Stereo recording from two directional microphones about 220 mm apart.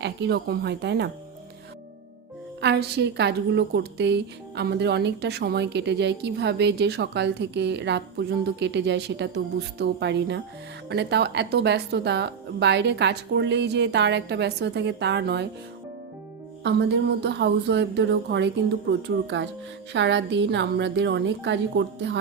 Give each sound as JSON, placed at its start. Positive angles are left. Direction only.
{"t": 0.0, "sound": "a woman's voice", "side_deg": -50}
{"t": 2.6, "sound": "a woman's voice", "side_deg": -50}
{"t": 16.7, "sound": "a woman's voice", "side_deg": -50}